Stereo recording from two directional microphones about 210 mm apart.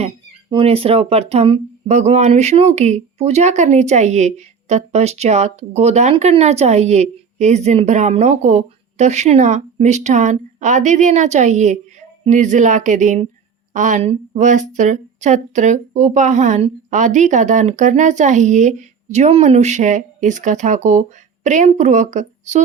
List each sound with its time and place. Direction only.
0.5 s speech: 25° right (ahead or behind)